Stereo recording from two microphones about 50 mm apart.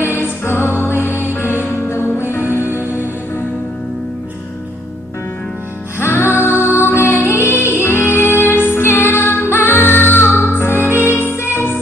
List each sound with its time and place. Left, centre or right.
0.0 s music: left
5.9 s music: left
10.6 s music: left